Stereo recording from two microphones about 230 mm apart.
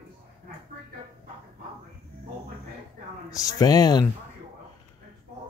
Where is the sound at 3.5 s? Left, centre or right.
Centre.